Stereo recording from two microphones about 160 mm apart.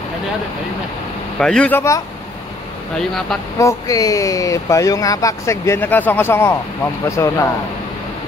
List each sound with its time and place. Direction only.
1.4 s speech: 5° left (ahead or behind)
3.0 s speech: centre (ahead or behind)
3.5 s speech: 20° left (ahead or behind)